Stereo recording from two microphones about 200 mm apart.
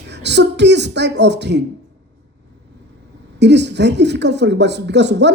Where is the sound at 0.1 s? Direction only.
60° right (ahead or behind).